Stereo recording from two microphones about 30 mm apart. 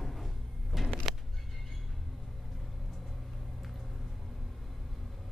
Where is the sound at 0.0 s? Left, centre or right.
Centre.